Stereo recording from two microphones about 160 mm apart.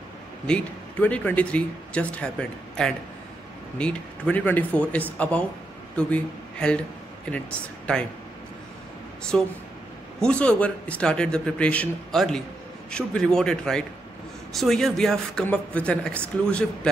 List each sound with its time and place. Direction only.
0.5 s speech: 10° left (ahead or behind)
9.3 s speech: 5° left (ahead or behind)